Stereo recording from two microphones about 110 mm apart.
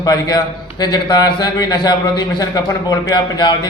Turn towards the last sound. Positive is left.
turn(degrees=40)  # may be behind; listen again after turning